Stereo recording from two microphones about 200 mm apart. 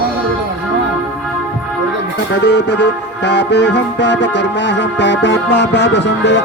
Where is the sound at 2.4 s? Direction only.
60° left (ahead or behind).